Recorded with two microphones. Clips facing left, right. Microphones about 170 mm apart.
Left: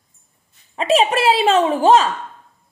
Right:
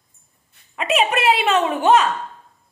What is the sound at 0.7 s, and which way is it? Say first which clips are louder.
A woman's voice: left 4 dB; 30° left (ahead or behind).